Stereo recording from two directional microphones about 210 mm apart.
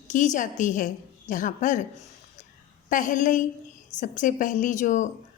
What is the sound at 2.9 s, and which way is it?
A woman's voice, 40° left (ahead or behind).